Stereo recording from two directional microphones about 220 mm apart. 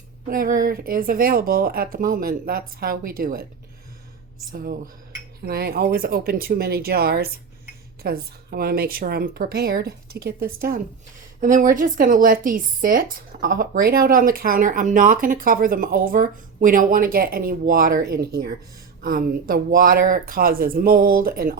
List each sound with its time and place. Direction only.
0.3 s speech: 40° right (ahead or behind)
5.5 s speech: 45° right (ahead or behind)